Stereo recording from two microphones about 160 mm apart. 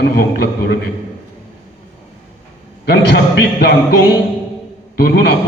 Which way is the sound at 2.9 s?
90° left.